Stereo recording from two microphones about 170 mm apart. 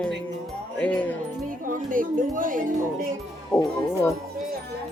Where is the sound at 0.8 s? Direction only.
10° left (ahead or behind).